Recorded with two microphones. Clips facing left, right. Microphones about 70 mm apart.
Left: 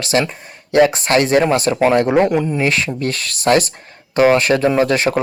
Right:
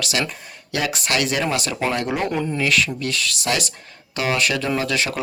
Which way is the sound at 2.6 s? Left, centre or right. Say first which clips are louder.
Left 3 dB; left.